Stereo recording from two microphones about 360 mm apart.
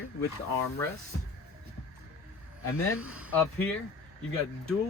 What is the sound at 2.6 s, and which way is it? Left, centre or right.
Speech, left.